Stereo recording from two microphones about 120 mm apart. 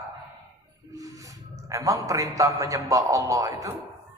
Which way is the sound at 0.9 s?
25° right (ahead or behind).